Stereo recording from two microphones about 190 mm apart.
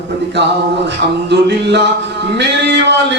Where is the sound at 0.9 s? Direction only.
65° right (ahead or behind).